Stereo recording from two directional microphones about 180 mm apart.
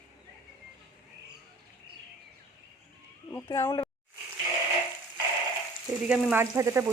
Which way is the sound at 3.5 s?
20° left (ahead or behind).